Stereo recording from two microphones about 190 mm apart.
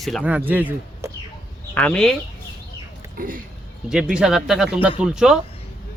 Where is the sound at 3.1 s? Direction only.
45° right (ahead or behind).